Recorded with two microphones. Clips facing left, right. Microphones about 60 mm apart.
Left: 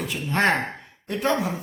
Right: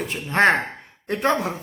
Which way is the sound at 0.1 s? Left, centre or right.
Right.